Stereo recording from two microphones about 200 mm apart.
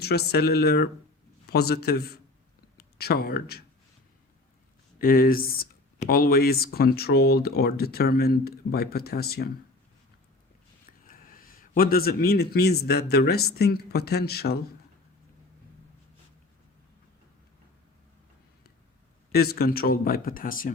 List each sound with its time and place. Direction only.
0.0 s speech: 55° left (ahead or behind)
4.9 s speech: 45° left (ahead or behind)
11.0 s a man's voice: 45° left (ahead or behind)
19.3 s speech: 50° left (ahead or behind)